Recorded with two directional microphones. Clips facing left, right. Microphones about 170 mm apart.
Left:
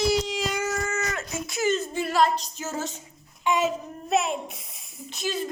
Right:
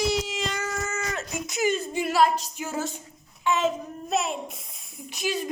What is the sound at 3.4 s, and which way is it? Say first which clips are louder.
Baby cry: even; 10° left (ahead or behind).